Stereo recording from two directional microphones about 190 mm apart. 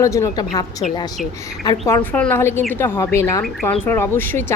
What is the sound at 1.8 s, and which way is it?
Speech, 10° left (ahead or behind).